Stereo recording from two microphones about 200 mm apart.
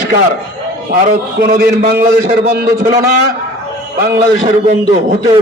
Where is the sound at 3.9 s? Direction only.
55° right (ahead or behind).